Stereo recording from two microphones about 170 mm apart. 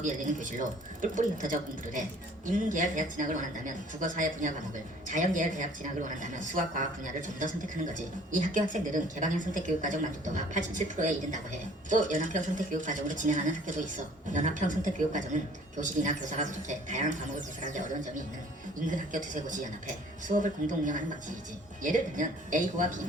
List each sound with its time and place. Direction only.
0.0 s a woman's voice: 50° right (ahead or behind)
18.9 s a woman's voice: 50° right (ahead or behind)